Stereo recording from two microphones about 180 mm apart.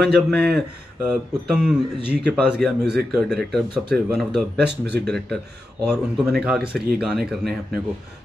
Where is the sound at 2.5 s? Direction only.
5° right (ahead or behind).